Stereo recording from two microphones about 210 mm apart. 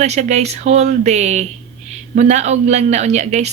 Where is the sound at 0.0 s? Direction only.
35° right (ahead or behind).